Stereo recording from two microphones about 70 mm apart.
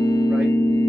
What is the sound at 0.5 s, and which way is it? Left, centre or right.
Music, left.